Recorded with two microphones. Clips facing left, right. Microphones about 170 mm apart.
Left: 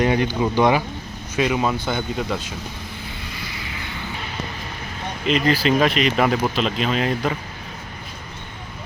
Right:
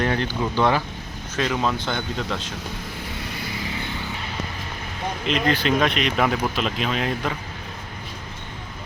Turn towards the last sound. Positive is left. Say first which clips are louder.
# left 3 dB
turn(degrees=0)  # may be behind; listen again after turning